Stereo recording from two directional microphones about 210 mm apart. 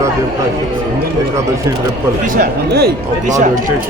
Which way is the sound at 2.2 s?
40° right (ahead or behind).